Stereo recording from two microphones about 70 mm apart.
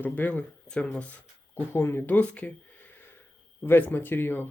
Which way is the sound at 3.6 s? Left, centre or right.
Left.